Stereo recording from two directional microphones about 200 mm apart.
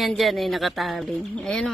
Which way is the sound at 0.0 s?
Centre (ahead or behind).